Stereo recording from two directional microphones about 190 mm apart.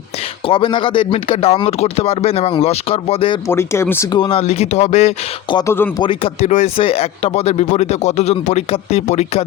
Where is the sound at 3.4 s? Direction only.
15° left (ahead or behind); by 5.6 s 35° left (ahead or behind).